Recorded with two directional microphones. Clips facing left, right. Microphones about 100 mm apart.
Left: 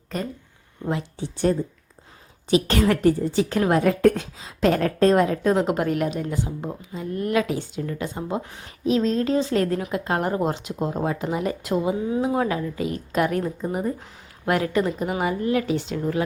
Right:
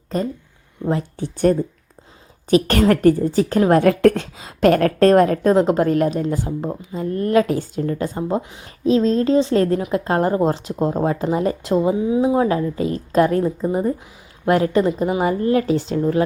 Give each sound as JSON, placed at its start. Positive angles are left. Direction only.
{"t": 1.2, "sound": "a woman's voice", "side_deg": -55}
{"t": 3.8, "sound": "a woman's voice", "side_deg": -70}
{"t": 5.5, "sound": "a woman's voice", "side_deg": -35}
{"t": 8.4, "sound": "speech", "side_deg": -15}
{"t": 8.8, "sound": "a woman's voice", "side_deg": -35}
{"t": 15.2, "sound": "speech", "side_deg": -40}